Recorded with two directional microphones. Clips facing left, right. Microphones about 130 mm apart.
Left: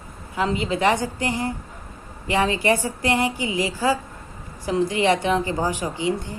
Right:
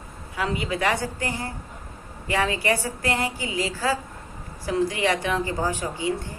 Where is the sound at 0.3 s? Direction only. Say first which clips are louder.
Left 3 dB; 25° left (ahead or behind).